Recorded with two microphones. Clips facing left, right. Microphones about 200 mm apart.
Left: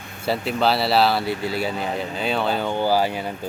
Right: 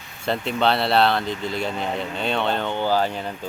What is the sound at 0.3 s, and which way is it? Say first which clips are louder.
Speech: left 1 dB; 5° left (ahead or behind).